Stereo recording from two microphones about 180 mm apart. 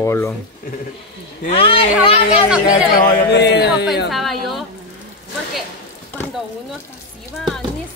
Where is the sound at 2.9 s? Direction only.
60° left (ahead or behind).